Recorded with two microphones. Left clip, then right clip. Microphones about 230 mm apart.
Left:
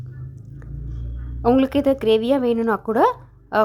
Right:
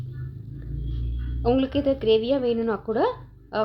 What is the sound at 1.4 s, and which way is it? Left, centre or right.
Speech, left.